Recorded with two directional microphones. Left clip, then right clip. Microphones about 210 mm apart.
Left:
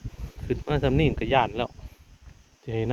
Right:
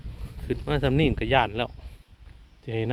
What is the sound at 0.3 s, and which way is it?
Speech, centre (ahead or behind).